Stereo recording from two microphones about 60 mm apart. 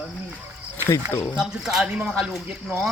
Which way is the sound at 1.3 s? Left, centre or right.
Centre.